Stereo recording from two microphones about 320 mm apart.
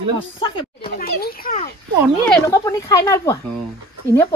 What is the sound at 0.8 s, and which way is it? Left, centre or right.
Speech, left.